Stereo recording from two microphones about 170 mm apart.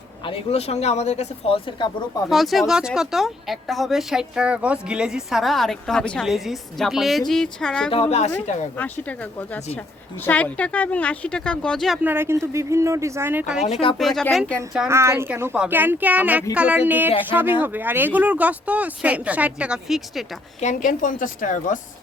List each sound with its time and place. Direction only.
0.3 s speech: 35° left (ahead or behind)
2.3 s speech: centre (ahead or behind)
7.9 s speech: 35° left (ahead or behind)
8.8 s speech: 10° left (ahead or behind)
12.0 s speech: 15° right (ahead or behind)
13.7 s speech: 35° left (ahead or behind)
14.0 s speech: 5° left (ahead or behind)
14.8 s speech: 15° right (ahead or behind)
20.6 s a woman's voice: 50° left (ahead or behind)